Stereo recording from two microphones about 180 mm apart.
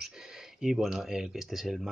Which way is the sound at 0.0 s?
5° right (ahead or behind).